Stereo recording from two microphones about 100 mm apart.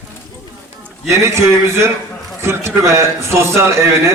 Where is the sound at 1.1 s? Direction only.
30° right (ahead or behind).